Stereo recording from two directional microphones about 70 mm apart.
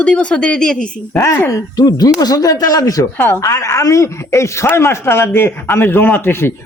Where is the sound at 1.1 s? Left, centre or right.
Left.